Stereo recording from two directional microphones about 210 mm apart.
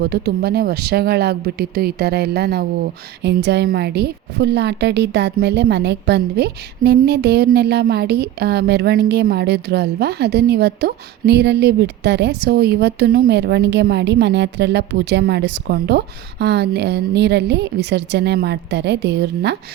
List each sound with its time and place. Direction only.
0.0 s a woman's voice: 50° right (ahead or behind)